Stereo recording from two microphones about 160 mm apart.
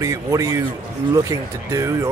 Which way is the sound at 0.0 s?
20° right (ahead or behind).